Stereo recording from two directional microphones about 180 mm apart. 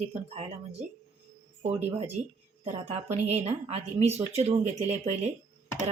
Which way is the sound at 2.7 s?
35° right (ahead or behind).